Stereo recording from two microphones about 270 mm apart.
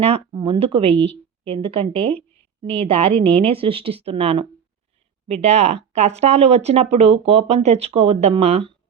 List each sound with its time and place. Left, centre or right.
0.0 s a woman's voice: centre